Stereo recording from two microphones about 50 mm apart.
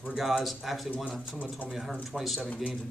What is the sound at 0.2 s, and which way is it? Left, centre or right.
Speech, centre.